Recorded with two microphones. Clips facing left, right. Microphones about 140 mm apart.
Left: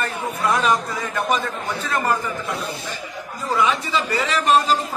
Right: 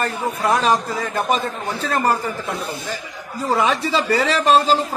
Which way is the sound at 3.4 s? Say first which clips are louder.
Right 2 dB; 35° right (ahead or behind).